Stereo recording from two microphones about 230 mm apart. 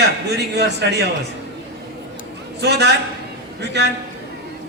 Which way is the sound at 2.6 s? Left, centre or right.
Right.